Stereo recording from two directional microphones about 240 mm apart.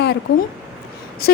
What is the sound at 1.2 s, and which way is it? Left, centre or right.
Speech, left.